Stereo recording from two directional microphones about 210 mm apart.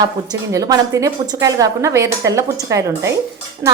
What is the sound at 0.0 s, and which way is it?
A woman's voice, 15° right (ahead or behind).